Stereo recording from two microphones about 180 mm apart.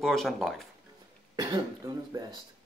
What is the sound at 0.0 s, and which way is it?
Speech, centre (ahead or behind).